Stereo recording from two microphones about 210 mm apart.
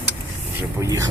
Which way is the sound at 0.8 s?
15° right (ahead or behind).